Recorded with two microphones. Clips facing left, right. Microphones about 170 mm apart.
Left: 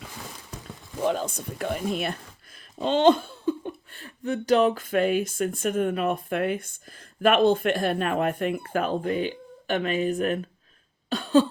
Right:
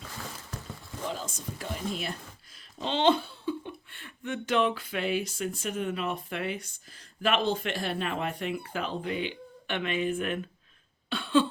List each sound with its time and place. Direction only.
1.0 s speech: 60° left (ahead or behind)
2.7 s speech: 45° left (ahead or behind)
11.1 s a sound: 40° left (ahead or behind)